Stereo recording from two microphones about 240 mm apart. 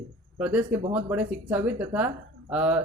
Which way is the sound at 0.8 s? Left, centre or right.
Right.